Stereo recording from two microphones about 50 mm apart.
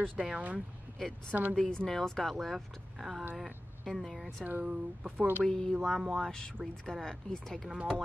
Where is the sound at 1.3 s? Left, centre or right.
Right.